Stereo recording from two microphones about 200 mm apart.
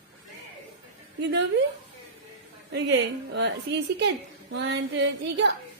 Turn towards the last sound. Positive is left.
turn(degrees=-60)  # may be behind; listen again after turning